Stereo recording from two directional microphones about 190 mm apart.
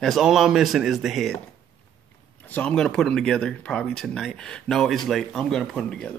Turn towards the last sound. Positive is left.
turn(degrees=5)  # may be behind; listen again after turning